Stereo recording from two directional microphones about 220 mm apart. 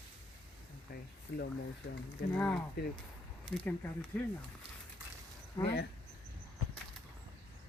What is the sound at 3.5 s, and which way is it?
Speech, 5° left (ahead or behind).